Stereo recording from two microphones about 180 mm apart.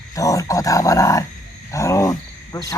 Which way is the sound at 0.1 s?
20° left (ahead or behind).